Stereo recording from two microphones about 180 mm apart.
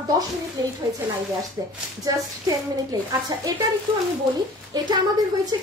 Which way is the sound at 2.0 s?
20° right (ahead or behind).